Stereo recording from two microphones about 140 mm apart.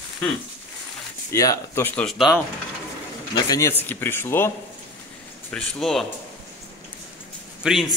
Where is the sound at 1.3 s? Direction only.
25° left (ahead or behind).